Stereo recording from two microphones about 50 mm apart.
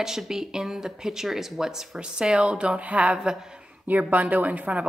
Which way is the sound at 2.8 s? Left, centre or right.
Right.